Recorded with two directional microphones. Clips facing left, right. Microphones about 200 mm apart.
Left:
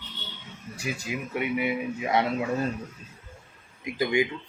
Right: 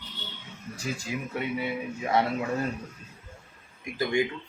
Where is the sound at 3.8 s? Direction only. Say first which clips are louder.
Left 2 dB; 15° left (ahead or behind).